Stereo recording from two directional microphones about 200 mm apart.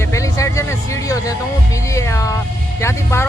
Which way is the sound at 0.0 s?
15° left (ahead or behind).